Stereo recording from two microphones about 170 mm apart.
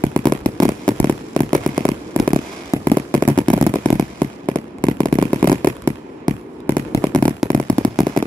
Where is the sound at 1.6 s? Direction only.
25° right (ahead or behind).